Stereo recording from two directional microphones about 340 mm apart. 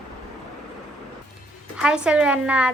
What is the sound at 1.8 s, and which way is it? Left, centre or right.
Speech, centre.